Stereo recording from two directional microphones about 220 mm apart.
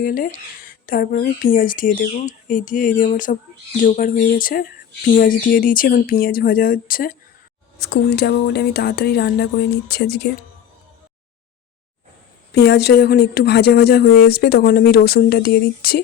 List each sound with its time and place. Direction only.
0.0 s speech: 40° left (ahead or behind)
12.5 s speech: 50° left (ahead or behind)